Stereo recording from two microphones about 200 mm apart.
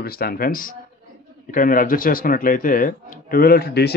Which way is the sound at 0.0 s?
50° left (ahead or behind).